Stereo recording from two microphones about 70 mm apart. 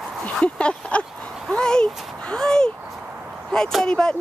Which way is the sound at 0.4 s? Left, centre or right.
Centre.